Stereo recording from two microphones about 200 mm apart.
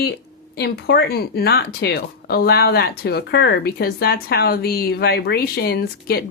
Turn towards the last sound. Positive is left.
turn(degrees=50)  # may be behind; listen again after turning